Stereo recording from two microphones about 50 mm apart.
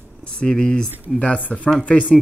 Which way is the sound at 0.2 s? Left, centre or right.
Centre.